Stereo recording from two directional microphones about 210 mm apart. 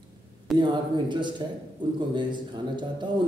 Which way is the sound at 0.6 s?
20° right (ahead or behind).